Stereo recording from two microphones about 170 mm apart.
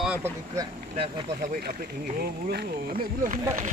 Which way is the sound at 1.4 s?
60° right (ahead or behind).